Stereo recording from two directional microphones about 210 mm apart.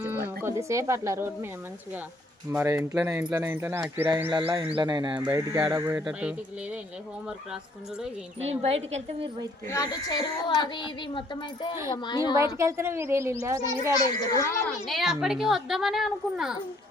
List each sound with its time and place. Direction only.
0.0 s music: 10° right (ahead or behind)
0.4 s speech: 15° right (ahead or behind)
2.5 s speech: 10° right (ahead or behind)
8.4 s speech: 30° right (ahead or behind)
9.6 s a child's voice: 15° left (ahead or behind)
12.5 s speech: 15° right (ahead or behind)
14.0 s speech: 20° left (ahead or behind)
14.7 s a woman's voice: centre (ahead or behind)